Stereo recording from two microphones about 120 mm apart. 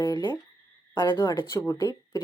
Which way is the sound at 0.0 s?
20° left (ahead or behind).